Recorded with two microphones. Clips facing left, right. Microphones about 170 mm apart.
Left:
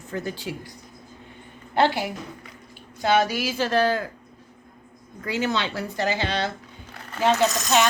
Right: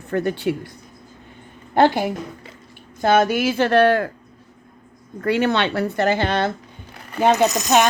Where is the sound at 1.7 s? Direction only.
45° right (ahead or behind); by 4.1 s 60° right (ahead or behind).